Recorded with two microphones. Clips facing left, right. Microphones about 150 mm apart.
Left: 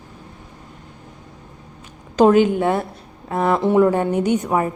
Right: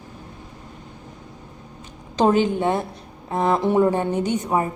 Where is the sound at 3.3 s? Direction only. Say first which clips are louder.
Left 2 dB; 20° right (ahead or behind).